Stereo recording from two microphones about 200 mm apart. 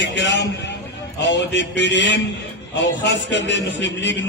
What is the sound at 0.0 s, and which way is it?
A man's voice, 65° left (ahead or behind).